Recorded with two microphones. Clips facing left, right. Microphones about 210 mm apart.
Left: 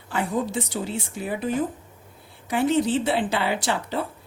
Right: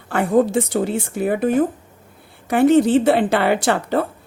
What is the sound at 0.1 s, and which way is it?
A woman's voice, 60° right (ahead or behind).